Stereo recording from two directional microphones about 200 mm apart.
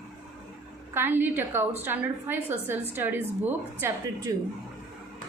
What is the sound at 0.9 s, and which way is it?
A woman's voice, 10° right (ahead or behind).